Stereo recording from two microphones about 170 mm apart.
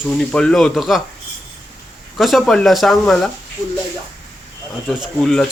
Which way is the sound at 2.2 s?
Centre (ahead or behind).